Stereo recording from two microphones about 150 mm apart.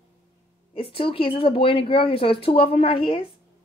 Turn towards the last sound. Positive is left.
turn(degrees=35)  # may be behind; listen again after turning